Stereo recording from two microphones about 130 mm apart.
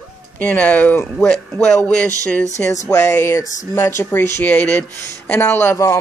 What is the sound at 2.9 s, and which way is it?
Speech, 20° left (ahead or behind).